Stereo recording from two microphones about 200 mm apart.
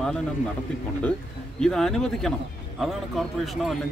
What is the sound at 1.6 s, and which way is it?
Speech, centre (ahead or behind).